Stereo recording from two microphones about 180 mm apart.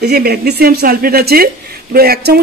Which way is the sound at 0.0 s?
60° right (ahead or behind).